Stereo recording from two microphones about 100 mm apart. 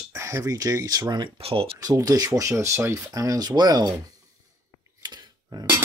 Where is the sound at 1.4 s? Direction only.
65° right (ahead or behind).